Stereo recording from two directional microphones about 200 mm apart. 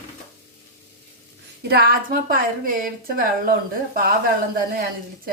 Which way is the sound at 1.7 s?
50° right (ahead or behind).